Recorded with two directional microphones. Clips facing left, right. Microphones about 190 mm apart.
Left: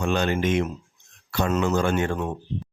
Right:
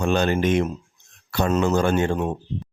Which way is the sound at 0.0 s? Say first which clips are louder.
Right 3 dB; 40° right (ahead or behind).